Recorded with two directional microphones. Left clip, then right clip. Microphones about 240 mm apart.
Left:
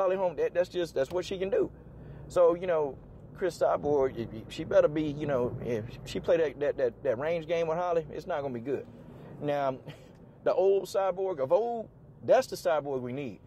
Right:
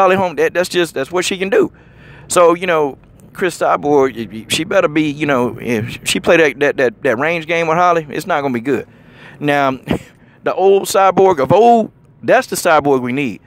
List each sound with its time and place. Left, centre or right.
0.0 s speech: right